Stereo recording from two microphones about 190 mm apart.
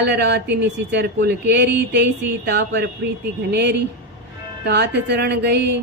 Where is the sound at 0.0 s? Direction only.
65° right (ahead or behind).